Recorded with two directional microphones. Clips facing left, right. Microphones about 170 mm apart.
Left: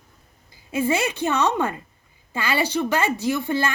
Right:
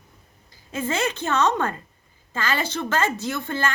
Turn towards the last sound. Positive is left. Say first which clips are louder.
# left 4 dB
turn(degrees=10)  # may be behind; listen again after turning